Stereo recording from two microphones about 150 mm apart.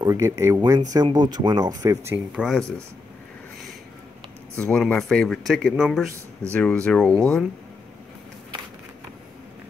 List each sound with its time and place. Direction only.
0.0 s speech: 20° right (ahead or behind)
2.3 s speech: centre (ahead or behind)
4.6 s speech: 5° left (ahead or behind)
6.5 s speech: 10° left (ahead or behind)